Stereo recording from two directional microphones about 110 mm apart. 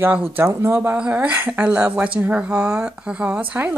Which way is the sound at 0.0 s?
15° right (ahead or behind).